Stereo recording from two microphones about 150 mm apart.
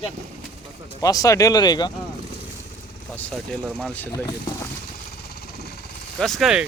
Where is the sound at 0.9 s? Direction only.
25° left (ahead or behind).